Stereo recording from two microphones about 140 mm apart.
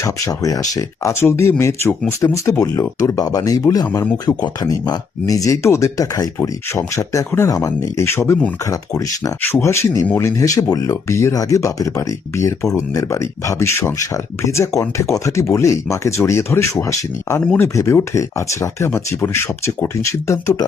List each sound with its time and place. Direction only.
0.0 s speech: 25° left (ahead or behind)
9.4 s speech: 15° left (ahead or behind)